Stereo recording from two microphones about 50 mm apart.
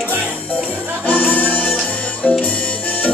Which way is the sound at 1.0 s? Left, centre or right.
Left.